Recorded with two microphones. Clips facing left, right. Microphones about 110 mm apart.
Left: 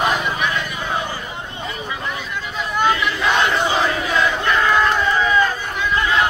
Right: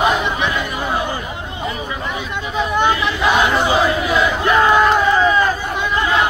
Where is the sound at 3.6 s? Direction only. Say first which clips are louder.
Right 4 dB; 10° right (ahead or behind).